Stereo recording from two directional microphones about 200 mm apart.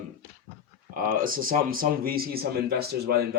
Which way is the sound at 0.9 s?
45° right (ahead or behind).